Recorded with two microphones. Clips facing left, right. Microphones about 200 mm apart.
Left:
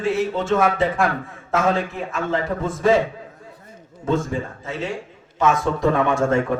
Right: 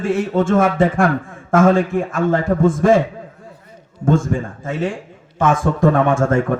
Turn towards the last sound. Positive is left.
turn(degrees=-50)  # may be behind; listen again after turning